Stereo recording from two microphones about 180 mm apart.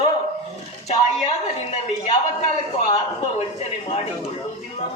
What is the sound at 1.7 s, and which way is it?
A man's voice, 35° left (ahead or behind).